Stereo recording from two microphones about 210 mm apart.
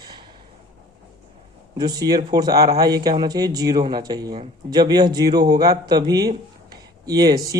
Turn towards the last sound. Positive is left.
turn(degrees=-15)  # may be behind; listen again after turning